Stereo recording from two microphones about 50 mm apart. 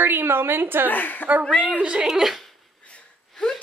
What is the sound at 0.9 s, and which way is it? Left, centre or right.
Speech, left.